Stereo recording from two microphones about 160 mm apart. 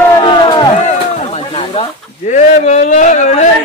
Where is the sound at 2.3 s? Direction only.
45° left (ahead or behind).